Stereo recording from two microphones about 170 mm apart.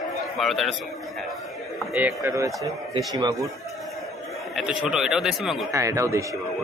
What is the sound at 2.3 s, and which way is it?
A man's voice, 20° right (ahead or behind).